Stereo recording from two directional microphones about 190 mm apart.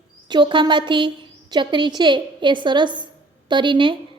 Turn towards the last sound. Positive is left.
turn(degrees=-25)  # may be behind; listen again after turning